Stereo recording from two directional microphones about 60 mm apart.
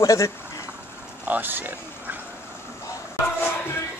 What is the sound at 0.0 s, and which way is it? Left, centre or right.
Speech, left.